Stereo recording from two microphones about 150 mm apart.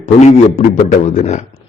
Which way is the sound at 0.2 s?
50° left (ahead or behind).